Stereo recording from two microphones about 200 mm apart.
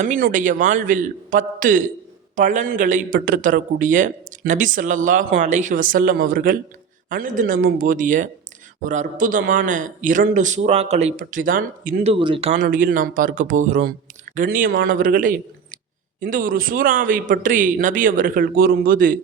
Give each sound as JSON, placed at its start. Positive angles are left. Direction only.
{"t": 0.0, "sound": "a man's voice", "side_deg": -40}
{"t": 12.2, "sound": "speech", "side_deg": -25}
{"t": 12.5, "sound": "a man's voice", "side_deg": -40}